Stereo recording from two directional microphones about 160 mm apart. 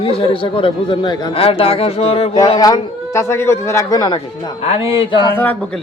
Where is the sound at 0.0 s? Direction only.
35° left (ahead or behind).